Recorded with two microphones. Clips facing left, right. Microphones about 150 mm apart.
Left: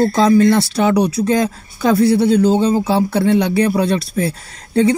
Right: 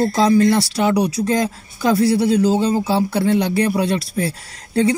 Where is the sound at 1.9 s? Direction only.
30° left (ahead or behind).